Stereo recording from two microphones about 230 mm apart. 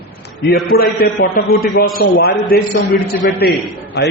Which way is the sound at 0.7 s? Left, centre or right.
Left.